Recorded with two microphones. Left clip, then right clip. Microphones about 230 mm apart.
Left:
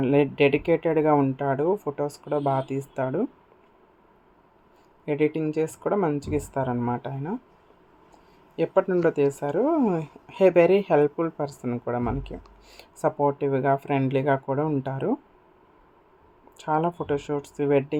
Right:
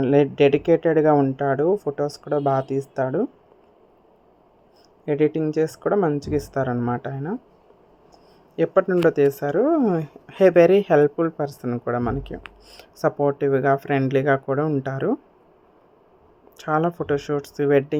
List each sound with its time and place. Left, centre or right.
0.0 s speech: centre
5.0 s speech: centre
8.5 s speech: centre
16.6 s speech: centre